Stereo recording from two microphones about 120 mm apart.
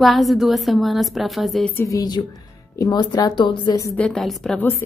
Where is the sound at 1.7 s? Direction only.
25° left (ahead or behind).